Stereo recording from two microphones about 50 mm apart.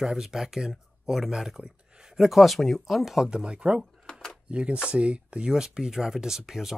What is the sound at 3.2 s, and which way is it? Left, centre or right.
Speech, centre.